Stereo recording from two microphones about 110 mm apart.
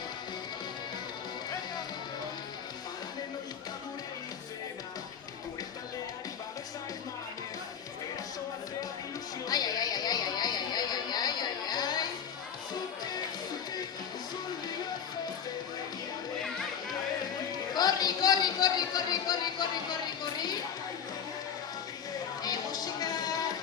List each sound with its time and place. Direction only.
9.5 s chatter: 35° left (ahead or behind)
17.7 s music: 35° left (ahead or behind)
22.4 s music: 35° left (ahead or behind)